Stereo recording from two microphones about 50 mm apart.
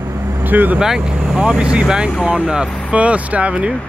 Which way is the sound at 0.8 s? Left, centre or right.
Centre.